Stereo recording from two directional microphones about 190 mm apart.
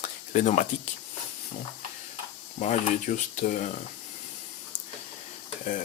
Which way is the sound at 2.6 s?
40° left (ahead or behind).